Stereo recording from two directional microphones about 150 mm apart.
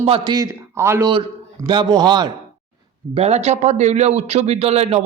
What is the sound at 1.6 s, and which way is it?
Speech, 30° right (ahead or behind).